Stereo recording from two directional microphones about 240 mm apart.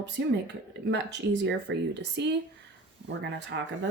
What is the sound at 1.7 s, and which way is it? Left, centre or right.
Speech, right.